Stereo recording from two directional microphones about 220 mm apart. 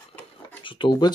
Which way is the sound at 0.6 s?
20° left (ahead or behind).